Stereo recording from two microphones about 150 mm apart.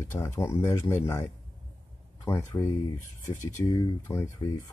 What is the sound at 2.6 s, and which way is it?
Speech, 15° left (ahead or behind).